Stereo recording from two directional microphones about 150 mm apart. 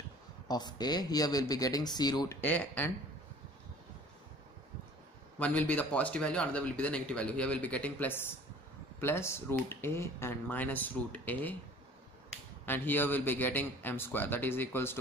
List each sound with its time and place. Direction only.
0.5 s speech: 25° left (ahead or behind)
2.4 s speech: 10° left (ahead or behind)
5.4 s speech: 10° left (ahead or behind)
12.6 s speech: 15° left (ahead or behind)